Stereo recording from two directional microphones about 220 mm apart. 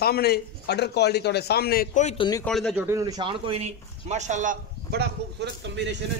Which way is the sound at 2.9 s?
15° right (ahead or behind).